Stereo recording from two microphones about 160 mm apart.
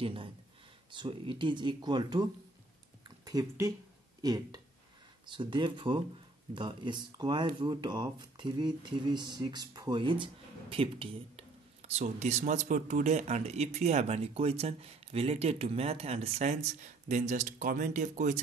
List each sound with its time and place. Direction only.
0.0 s speech: 35° right (ahead or behind)
3.3 s speech: 20° right (ahead or behind); by 18.4 s 50° right (ahead or behind)